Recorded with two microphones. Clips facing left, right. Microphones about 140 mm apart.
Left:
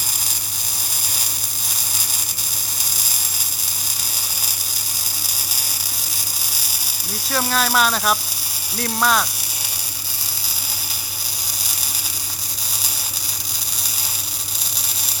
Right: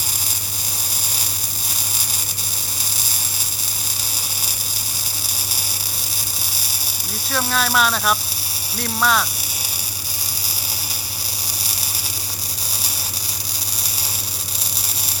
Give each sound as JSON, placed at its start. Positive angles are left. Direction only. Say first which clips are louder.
{"t": 7.3, "sound": "speech", "louder": "left 1 dB", "side_deg": 0}